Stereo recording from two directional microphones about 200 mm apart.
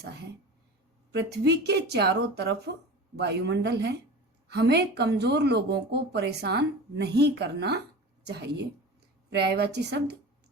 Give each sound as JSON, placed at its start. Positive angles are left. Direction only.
{"t": 1.1, "sound": "speech", "side_deg": -55}